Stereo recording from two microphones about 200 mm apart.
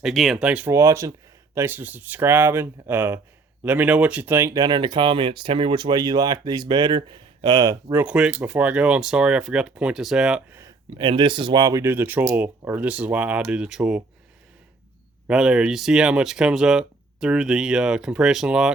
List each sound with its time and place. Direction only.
0.0 s speech: centre (ahead or behind); by 8.0 s 20° right (ahead or behind)
8.0 s speech: 5° right (ahead or behind)
10.6 s speech: 25° right (ahead or behind); by 14.0 s 5° right (ahead or behind)
15.3 s speech: 5° right (ahead or behind)